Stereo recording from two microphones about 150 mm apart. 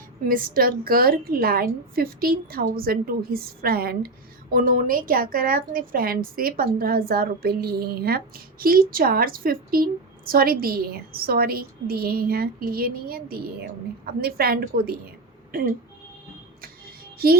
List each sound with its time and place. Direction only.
0.3 s a woman's voice: 75° right (ahead or behind); by 4.1 s 90° right
4.5 s a woman's voice: 65° right (ahead or behind); by 15.0 s 85° right
15.5 s speech: 75° right (ahead or behind)